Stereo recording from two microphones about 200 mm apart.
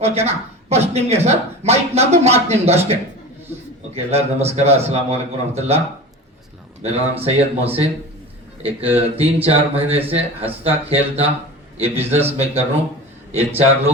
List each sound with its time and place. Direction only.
0.0 s speech: 30° right (ahead or behind)
6.8 s speech: 30° right (ahead or behind)